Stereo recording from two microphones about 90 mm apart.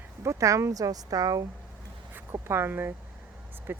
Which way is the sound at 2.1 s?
25° right (ahead or behind).